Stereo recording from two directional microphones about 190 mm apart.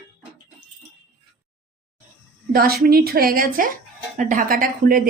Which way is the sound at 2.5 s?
50° right (ahead or behind).